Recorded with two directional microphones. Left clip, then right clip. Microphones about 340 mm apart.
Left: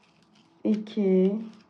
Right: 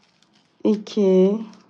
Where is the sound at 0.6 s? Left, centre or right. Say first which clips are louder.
Right 8 dB; centre.